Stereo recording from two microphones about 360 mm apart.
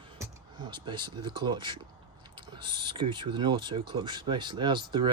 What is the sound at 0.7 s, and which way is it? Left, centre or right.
Speech, centre.